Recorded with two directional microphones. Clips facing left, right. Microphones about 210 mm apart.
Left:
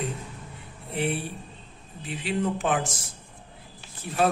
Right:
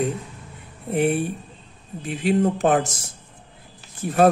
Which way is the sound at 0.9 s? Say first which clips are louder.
Right 8 dB; 50° right (ahead or behind).